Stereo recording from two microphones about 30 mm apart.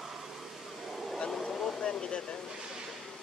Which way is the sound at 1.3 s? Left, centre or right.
Centre.